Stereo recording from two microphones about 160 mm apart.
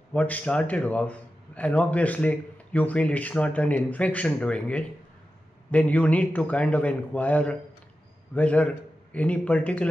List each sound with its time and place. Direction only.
0.1 s a man's voice: 10° left (ahead or behind)